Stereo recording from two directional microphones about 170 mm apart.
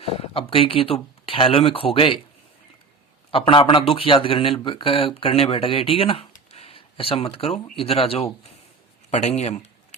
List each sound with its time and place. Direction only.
0.0 s speech: 35° left (ahead or behind)
3.3 s speech: 30° left (ahead or behind)